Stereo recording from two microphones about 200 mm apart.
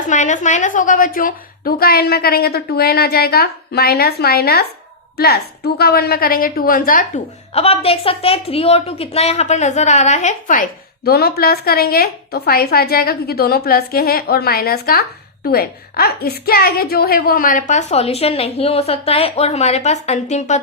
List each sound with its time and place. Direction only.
0.1 s a woman's voice: 40° left (ahead or behind)
7.5 s a woman's voice: 30° left (ahead or behind)